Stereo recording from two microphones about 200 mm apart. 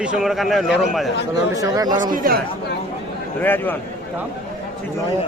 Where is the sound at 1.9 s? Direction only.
40° right (ahead or behind).